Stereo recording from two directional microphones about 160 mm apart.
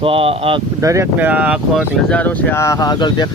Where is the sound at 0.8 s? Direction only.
20° right (ahead or behind).